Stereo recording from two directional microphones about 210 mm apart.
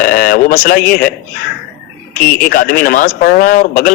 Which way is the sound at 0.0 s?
40° left (ahead or behind).